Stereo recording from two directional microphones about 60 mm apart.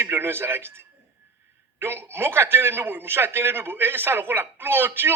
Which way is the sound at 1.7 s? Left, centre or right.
Right.